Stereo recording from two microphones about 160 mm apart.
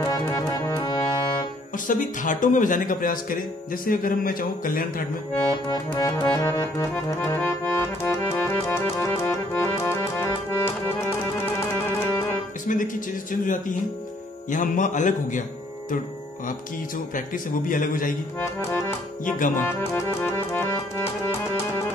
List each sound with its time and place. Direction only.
0.1 s music: 20° left (ahead or behind)
1.9 s speech: 55° left (ahead or behind)
5.7 s accordion: 25° left (ahead or behind)
12.6 s a man's voice: 55° left (ahead or behind)
17.1 s speech: 55° left (ahead or behind)
18.4 s accordion: 15° left (ahead or behind)
19.2 s speech: 55° left (ahead or behind)
19.5 s accordion: 15° left (ahead or behind)